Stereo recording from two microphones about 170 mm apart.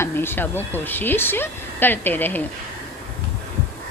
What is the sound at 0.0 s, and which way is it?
Speech, 15° left (ahead or behind).